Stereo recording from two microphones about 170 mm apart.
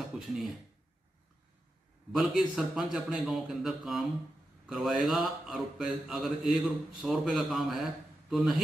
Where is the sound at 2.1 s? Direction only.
Centre (ahead or behind).